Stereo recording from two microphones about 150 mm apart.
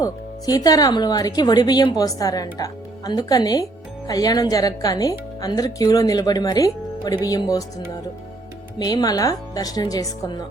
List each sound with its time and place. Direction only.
0.0 s speech: 25° left (ahead or behind)
8.8 s speech: 25° left (ahead or behind)